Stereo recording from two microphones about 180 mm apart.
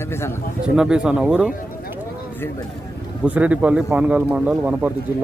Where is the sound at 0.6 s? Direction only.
5° right (ahead or behind).